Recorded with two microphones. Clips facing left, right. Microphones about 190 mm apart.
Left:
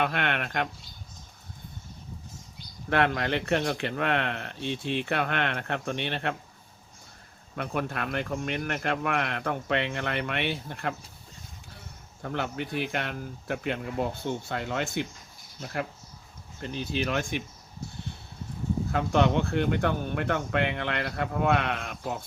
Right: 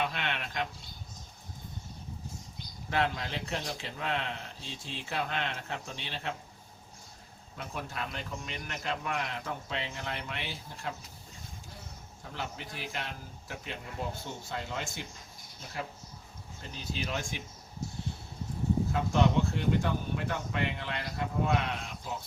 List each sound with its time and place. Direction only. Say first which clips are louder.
0.0 s speech: left 6 dB; 60° left (ahead or behind)
2.9 s speech: left 6 dB; 65° left (ahead or behind)
7.5 s speech: left 8 dB; 65° left (ahead or behind)
12.2 s speech: left 9 dB; 65° left (ahead or behind)
18.9 s speech: left 6 dB; 65° left (ahead or behind)